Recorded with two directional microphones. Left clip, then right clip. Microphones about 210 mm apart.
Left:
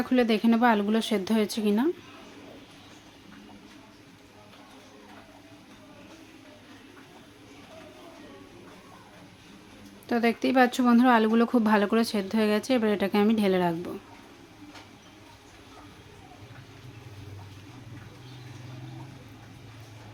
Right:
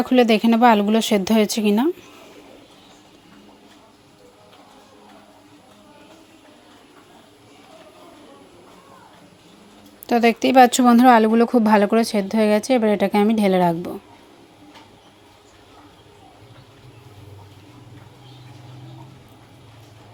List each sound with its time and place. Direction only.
0.0 s speech: 25° right (ahead or behind)
10.1 s speech: 25° right (ahead or behind)